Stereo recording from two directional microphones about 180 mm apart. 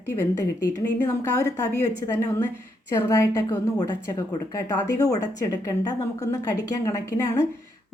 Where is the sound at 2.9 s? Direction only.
15° left (ahead or behind).